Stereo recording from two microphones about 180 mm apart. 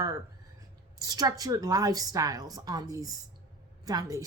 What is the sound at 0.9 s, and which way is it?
A woman's voice, 20° right (ahead or behind).